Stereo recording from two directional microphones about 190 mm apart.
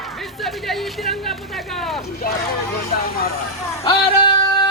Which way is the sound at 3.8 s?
25° left (ahead or behind).